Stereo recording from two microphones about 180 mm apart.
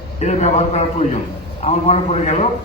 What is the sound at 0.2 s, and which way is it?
A man's voice, 40° left (ahead or behind).